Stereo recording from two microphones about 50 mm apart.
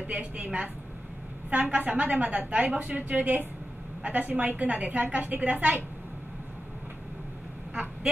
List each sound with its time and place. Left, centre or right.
0.0 s a woman's voice: right